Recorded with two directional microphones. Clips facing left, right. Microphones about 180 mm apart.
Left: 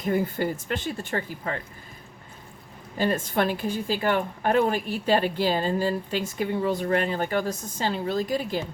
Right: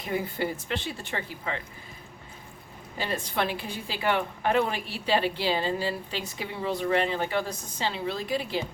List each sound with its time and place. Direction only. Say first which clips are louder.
0.0 s a woman's voice: left 5 dB; 45° left (ahead or behind)
3.0 s a woman's voice: left 5 dB; 45° left (ahead or behind)